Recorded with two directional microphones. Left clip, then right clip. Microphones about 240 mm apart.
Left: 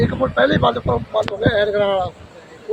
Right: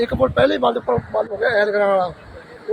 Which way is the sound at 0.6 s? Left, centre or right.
Centre.